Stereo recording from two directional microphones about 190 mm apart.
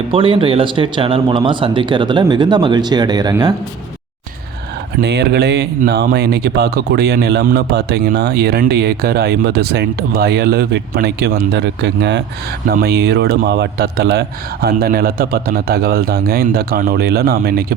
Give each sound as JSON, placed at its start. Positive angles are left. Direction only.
{"t": 0.1, "sound": "speech", "side_deg": -30}
{"t": 4.9, "sound": "speech", "side_deg": -60}
{"t": 12.6, "sound": "a man's voice", "side_deg": -55}